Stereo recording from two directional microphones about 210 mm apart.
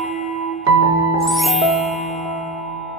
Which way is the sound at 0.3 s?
35° left (ahead or behind).